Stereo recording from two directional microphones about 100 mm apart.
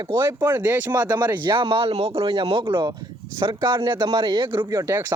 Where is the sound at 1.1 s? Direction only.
45° right (ahead or behind); by 2.6 s 60° right (ahead or behind).